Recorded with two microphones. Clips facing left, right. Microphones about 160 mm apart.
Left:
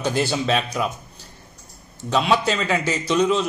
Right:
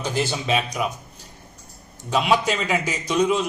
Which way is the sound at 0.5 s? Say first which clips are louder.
Left 1 dB; 10° right (ahead or behind).